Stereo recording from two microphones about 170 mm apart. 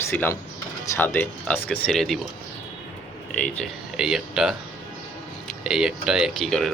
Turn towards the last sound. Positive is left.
turn(degrees=0)  # may be behind; listen again after turning